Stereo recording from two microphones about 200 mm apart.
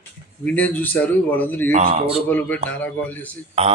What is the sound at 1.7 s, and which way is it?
Speech, 40° right (ahead or behind).